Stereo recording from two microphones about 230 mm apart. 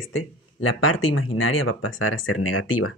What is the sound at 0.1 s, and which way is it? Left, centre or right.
Speech, left.